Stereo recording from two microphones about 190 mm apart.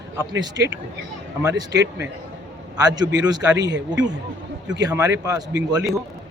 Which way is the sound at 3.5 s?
65° right (ahead or behind).